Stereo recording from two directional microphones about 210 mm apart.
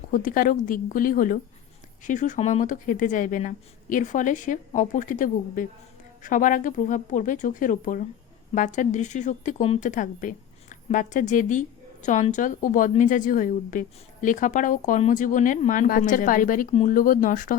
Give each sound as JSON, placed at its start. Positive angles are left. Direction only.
{"t": 0.1, "sound": "a woman's voice", "side_deg": 40}